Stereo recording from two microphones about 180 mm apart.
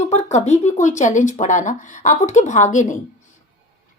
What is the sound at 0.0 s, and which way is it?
A woman's voice, 40° left (ahead or behind).